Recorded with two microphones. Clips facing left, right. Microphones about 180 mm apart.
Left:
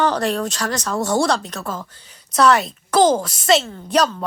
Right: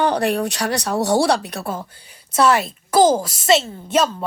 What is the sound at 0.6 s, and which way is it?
Speech, 65° right (ahead or behind).